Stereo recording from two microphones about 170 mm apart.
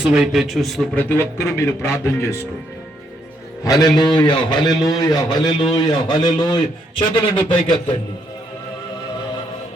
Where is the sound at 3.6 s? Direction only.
20° left (ahead or behind).